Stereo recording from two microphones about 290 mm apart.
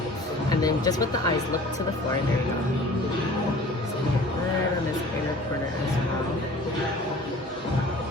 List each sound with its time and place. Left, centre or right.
0.6 s speech: centre